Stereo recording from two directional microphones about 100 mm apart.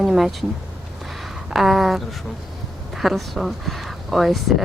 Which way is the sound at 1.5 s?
5° right (ahead or behind).